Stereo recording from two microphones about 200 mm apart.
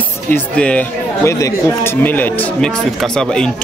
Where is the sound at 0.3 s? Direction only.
5° left (ahead or behind).